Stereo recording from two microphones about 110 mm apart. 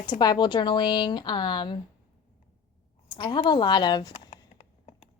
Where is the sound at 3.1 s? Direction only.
45° left (ahead or behind).